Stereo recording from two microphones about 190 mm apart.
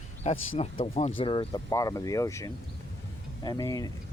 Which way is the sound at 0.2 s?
30° left (ahead or behind).